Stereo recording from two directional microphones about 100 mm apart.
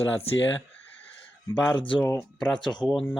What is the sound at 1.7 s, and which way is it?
Speech, 55° left (ahead or behind).